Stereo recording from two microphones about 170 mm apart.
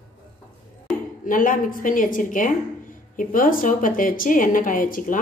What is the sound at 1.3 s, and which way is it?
A woman's voice, 55° left (ahead or behind).